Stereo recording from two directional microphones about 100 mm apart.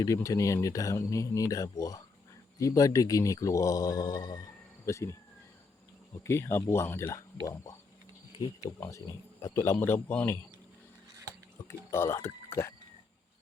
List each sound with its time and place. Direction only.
0.0 s speech: 35° left (ahead or behind)
4.9 s speech: 30° left (ahead or behind)
6.2 s speech: 25° left (ahead or behind)
8.8 s speech: 30° left (ahead or behind)
9.7 s speech: 20° left (ahead or behind)
11.9 s speech: 25° left (ahead or behind)